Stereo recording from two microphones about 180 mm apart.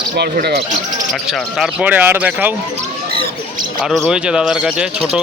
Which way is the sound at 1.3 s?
Centre (ahead or behind).